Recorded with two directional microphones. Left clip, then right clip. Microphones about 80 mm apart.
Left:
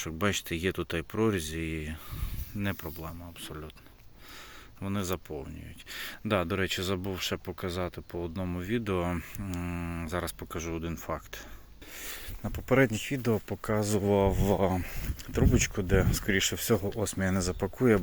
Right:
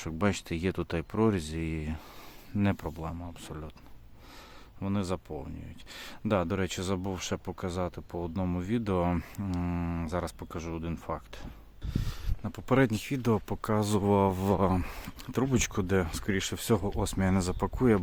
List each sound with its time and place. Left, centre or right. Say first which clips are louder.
0.2 s speech: left 1 dB; right
4.8 s speech: even; right
10.1 s speech: left 3 dB; right
10.6 s speech: left 2 dB; right
11.9 s a sound: even; centre
12.6 s speech: left 1 dB; right
14.1 s a sound: even; right
15.3 s speech: left 1 dB; right
16.2 s speech: left 4 dB; right
16.6 s speech: left 1 dB; right